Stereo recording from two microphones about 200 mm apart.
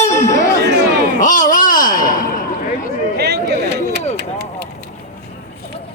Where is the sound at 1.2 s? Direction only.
40° left (ahead or behind).